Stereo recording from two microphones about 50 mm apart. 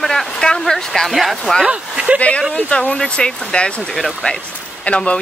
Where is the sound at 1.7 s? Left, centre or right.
Right.